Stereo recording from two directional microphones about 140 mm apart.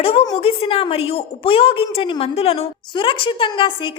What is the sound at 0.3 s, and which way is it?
A woman's voice, 45° left (ahead or behind).